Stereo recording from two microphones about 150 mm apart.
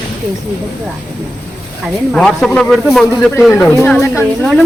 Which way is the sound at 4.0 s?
15° left (ahead or behind).